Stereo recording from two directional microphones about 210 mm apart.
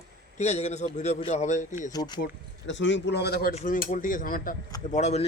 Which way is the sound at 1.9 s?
20° left (ahead or behind).